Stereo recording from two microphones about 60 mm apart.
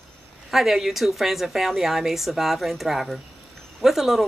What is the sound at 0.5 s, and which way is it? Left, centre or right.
Speech, centre.